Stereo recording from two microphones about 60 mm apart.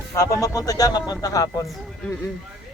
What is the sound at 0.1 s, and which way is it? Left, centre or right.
Speech, left.